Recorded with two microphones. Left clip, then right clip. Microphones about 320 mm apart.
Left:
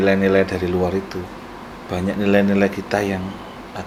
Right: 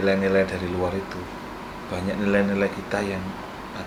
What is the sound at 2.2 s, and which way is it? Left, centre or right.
Speech, left.